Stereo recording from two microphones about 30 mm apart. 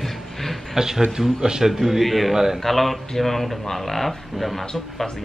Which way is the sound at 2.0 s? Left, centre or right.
Centre.